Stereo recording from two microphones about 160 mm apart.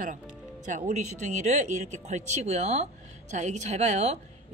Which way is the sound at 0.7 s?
50° right (ahead or behind).